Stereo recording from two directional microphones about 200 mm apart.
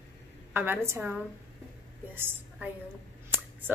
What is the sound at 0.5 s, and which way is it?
Speech, 10° right (ahead or behind).